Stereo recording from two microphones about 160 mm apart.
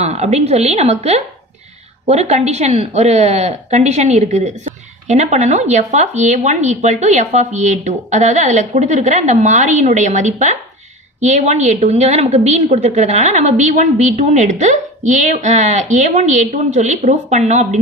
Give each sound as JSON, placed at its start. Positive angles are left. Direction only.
{"t": 0.0, "sound": "a woman's voice", "side_deg": -45}